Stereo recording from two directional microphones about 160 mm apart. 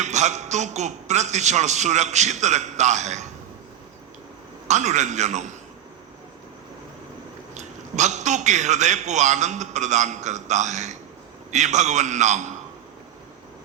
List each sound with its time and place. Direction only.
0.0 s a man's voice: 45° right (ahead or behind)
4.7 s a man's voice: 45° right (ahead or behind)
7.5 s a man's voice: 45° right (ahead or behind)